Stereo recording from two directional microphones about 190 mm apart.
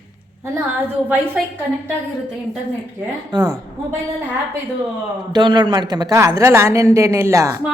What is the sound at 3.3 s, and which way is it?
Speech, 20° right (ahead or behind).